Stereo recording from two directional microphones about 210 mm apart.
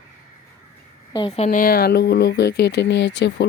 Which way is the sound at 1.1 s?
25° left (ahead or behind).